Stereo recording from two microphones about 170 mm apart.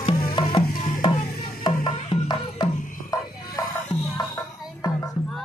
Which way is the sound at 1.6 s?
25° left (ahead or behind).